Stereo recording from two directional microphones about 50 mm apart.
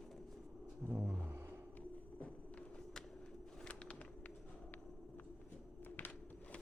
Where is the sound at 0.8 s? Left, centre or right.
Right.